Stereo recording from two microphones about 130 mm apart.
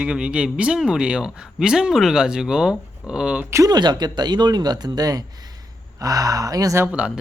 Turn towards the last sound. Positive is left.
turn(degrees=-10)  # may be behind; listen again after turning